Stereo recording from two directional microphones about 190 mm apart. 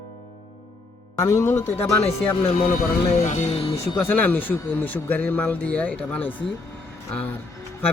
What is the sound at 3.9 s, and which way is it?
Speech, 10° left (ahead or behind).